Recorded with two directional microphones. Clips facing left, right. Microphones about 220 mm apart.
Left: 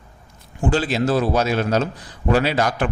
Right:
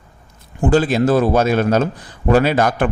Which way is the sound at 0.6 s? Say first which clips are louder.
Right 5 dB; 50° right (ahead or behind).